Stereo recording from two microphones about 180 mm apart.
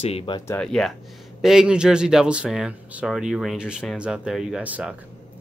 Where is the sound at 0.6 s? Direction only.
5° left (ahead or behind).